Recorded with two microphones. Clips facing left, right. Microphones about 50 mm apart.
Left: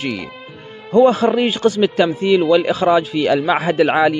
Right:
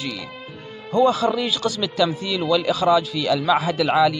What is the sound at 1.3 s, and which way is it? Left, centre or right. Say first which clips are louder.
A man's voice: left 7 dB; left.